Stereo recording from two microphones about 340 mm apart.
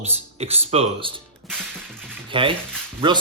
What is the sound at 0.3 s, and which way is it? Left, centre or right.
Speech, centre.